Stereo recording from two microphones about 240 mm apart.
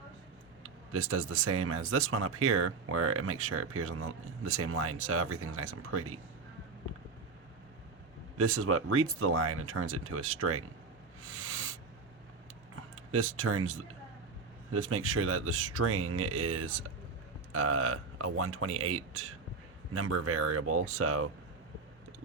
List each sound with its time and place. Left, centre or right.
0.6 s speech: right
8.4 s speech: right
11.2 s owl: right
13.1 s speech: right